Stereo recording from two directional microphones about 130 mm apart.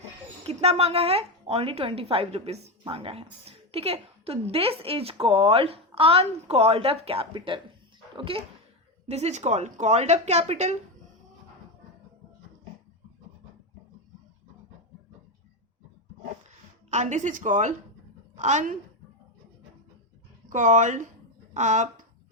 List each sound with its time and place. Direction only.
0.4 s a woman's voice: 55° right (ahead or behind)
9.0 s a woman's voice: 55° right (ahead or behind)
16.9 s a woman's voice: 65° right (ahead or behind)
20.5 s a woman's voice: 75° right (ahead or behind)